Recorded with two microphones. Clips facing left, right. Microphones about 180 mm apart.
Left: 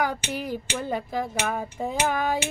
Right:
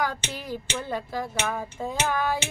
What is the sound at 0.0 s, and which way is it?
Speech, 15° left (ahead or behind).